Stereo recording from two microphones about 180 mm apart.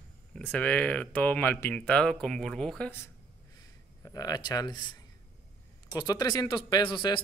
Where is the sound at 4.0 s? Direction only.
20° left (ahead or behind).